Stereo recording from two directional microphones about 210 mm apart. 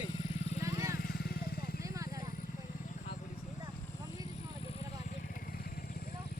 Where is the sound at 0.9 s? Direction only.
45° left (ahead or behind).